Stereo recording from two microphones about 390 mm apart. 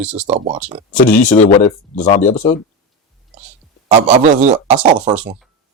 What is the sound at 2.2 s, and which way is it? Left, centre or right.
Speech, centre.